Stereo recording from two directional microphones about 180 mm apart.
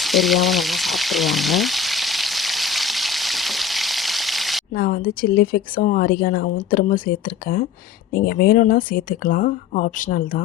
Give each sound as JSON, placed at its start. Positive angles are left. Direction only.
{"t": 0.0, "sound": "frying", "side_deg": 0}
{"t": 4.7, "sound": "speech", "side_deg": 55}